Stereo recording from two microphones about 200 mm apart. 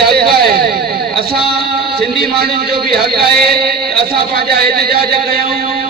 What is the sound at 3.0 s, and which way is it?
A man's voice, 50° right (ahead or behind).